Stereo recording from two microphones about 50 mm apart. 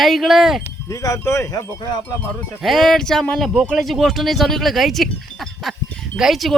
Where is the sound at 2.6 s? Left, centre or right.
Centre.